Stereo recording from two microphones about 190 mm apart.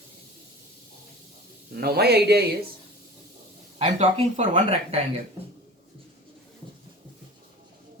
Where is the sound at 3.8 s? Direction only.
35° right (ahead or behind).